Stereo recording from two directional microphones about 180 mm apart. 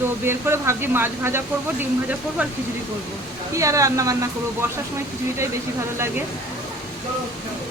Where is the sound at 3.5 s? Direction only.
15° right (ahead or behind).